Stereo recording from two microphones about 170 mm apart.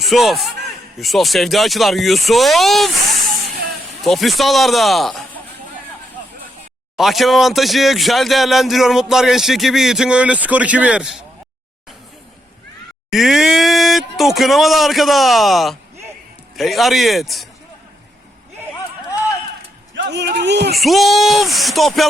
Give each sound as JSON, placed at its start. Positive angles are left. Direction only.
{"t": 0.0, "sound": "speech", "side_deg": 0}
{"t": 6.9, "sound": "speech", "side_deg": 0}
{"t": 13.1, "sound": "speech", "side_deg": 0}
{"t": 20.0, "sound": "speech", "side_deg": -90}
{"t": 20.7, "sound": "speech", "side_deg": 0}